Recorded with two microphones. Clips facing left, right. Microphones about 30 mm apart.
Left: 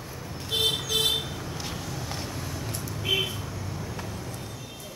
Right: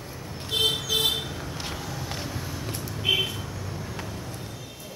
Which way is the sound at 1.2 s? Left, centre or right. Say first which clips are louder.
Right 1 dB; centre.